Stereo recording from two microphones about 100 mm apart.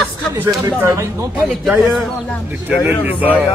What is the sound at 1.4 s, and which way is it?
Speech, centre (ahead or behind).